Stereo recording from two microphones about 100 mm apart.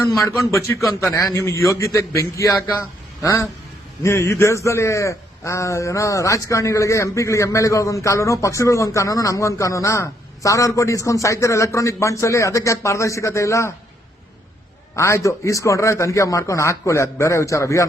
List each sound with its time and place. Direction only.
0.2 s a man's voice: 30° left (ahead or behind)
14.9 s a man's voice: 30° left (ahead or behind)